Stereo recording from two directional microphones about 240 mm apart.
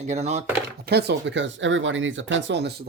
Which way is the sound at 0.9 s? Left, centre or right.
Right.